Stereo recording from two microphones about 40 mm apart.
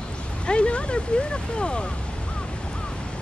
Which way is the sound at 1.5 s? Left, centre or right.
Left.